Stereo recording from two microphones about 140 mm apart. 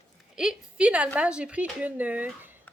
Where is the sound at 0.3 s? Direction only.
5° right (ahead or behind).